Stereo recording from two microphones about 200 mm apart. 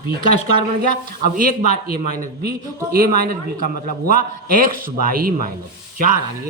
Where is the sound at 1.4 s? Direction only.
45° right (ahead or behind).